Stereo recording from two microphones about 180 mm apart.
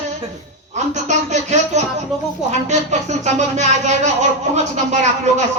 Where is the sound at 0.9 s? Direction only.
40° right (ahead or behind).